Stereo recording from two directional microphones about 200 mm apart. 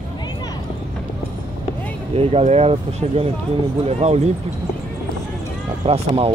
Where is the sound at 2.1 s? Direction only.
30° right (ahead or behind).